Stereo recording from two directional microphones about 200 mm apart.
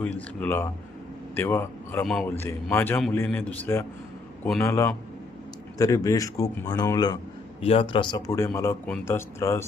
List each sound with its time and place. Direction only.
0.0 s a man's voice: 10° left (ahead or behind); by 8.2 s 25° left (ahead or behind)
8.3 s a man's voice: 15° left (ahead or behind)